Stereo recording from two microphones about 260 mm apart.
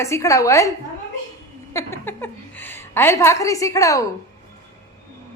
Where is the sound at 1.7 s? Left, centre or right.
Centre.